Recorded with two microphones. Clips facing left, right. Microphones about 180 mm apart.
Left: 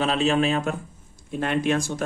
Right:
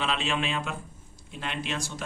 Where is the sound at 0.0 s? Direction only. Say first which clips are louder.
Left 8 dB; 40° left (ahead or behind).